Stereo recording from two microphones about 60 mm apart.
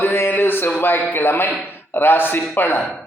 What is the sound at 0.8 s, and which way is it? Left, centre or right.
A man's voice, left.